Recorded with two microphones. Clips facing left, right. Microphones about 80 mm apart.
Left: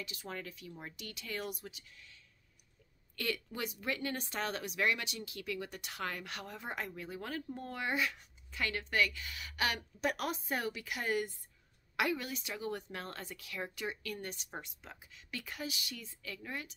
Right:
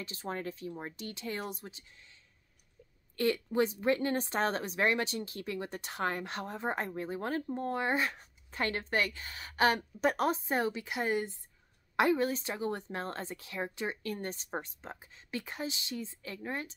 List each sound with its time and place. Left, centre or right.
0.0 s a woman's voice: right
3.2 s a woman's voice: right